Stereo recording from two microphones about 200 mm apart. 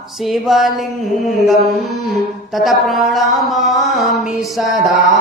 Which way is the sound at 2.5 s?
Centre (ahead or behind).